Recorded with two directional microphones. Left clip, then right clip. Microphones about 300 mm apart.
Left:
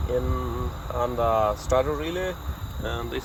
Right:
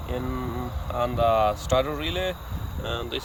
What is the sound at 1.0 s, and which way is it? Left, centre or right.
Speech, centre.